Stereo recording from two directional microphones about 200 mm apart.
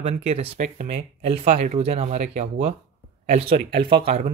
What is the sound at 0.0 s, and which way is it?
Speech, 30° right (ahead or behind).